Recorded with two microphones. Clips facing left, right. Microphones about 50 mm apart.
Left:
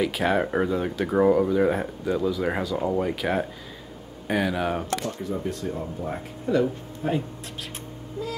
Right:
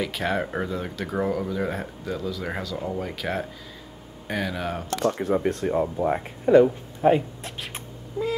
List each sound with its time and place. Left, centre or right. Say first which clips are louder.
0.0 s speech: left 3 dB; centre
5.0 s speech: right 7 dB; right